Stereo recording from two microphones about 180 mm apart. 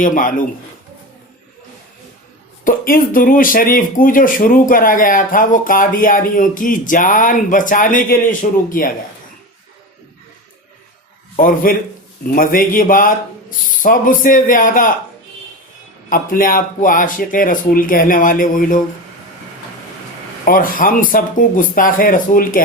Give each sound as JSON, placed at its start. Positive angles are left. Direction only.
{"t": 0.0, "sound": "speech", "side_deg": 50}
{"t": 2.6, "sound": "speech", "side_deg": 50}
{"t": 11.3, "sound": "speech", "side_deg": 50}
{"t": 16.0, "sound": "speech", "side_deg": 50}
{"t": 20.4, "sound": "speech", "side_deg": 50}